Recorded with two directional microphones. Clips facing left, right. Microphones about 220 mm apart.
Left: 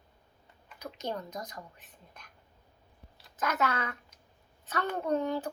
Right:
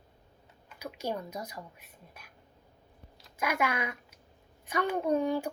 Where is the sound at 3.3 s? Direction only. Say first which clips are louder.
Even; 10° right (ahead or behind).